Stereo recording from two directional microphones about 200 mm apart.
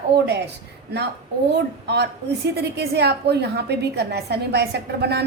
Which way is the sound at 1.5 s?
55° right (ahead or behind).